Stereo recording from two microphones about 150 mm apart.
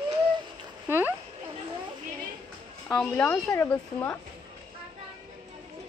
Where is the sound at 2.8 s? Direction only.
15° left (ahead or behind).